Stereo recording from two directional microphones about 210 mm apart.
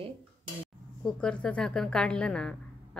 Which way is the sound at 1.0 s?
5° left (ahead or behind).